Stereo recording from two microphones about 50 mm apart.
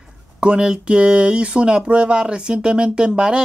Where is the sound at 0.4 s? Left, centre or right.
Centre.